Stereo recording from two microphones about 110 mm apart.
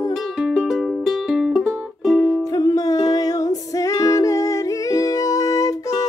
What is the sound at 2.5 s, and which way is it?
Music, 35° left (ahead or behind).